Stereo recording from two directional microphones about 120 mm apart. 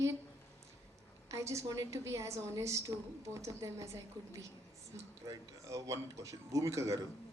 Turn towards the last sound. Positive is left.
turn(degrees=-25)  # may be behind; listen again after turning